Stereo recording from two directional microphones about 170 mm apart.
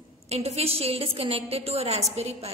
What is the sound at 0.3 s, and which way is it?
A woman's voice, 40° right (ahead or behind).